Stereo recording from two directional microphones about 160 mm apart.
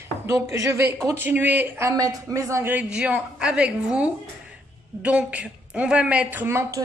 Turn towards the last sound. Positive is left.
turn(degrees=-20)  # may be behind; listen again after turning